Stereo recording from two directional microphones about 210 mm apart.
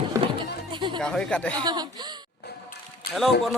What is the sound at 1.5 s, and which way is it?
Speech, 20° right (ahead or behind).